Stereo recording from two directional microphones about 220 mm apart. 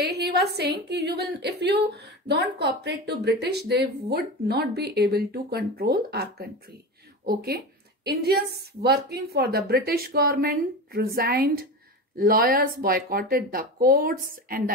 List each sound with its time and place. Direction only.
0.0 s a woman's voice: 50° right (ahead or behind)